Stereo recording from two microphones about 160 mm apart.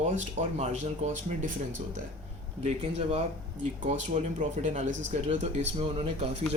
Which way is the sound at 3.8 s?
50° right (ahead or behind).